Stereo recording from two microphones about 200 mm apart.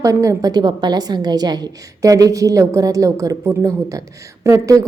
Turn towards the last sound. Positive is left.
turn(degrees=-15)  # may be behind; listen again after turning